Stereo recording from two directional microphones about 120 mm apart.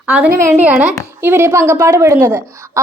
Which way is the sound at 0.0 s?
10° right (ahead or behind).